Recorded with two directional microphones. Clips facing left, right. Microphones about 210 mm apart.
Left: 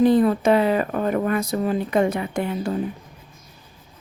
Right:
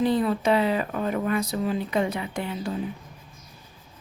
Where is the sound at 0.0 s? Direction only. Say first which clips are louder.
Left 6 dB; 50° left (ahead or behind).